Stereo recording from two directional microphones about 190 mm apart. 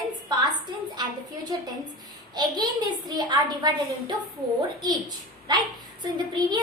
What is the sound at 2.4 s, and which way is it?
A woman's voice, 20° right (ahead or behind).